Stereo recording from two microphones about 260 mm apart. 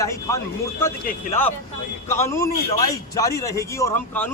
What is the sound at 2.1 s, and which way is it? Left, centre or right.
A man's voice, centre.